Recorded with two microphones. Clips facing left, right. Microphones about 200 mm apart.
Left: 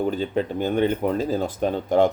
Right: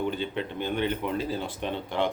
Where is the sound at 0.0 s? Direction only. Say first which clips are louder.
Left 6 dB; 40° left (ahead or behind).